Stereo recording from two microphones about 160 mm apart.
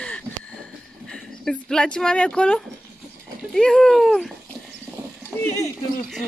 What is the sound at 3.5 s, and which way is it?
Speech, 5° left (ahead or behind).